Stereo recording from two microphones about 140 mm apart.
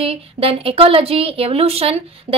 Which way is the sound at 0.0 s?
45° right (ahead or behind).